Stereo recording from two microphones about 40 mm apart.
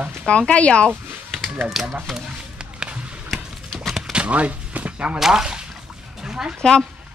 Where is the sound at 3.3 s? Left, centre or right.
Centre.